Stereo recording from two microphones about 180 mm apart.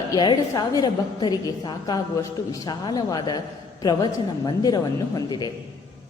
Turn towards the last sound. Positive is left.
turn(degrees=20)  # may be behind; listen again after turning